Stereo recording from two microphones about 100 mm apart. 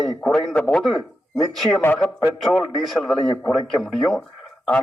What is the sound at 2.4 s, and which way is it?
A man's voice, centre (ahead or behind).